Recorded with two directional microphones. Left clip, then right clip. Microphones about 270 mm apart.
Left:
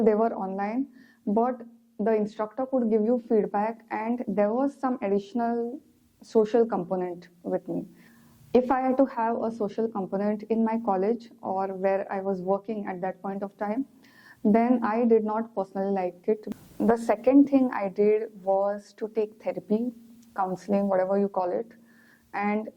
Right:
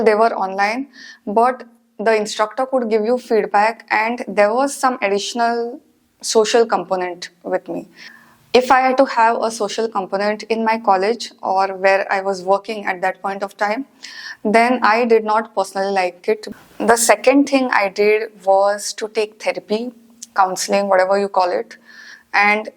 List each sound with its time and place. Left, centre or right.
0.0 s a woman's voice: centre
2.6 s speech: centre
2.9 s a woman's voice: centre
8.5 s a woman's voice: centre
18.4 s speech: right
18.7 s a woman's voice: centre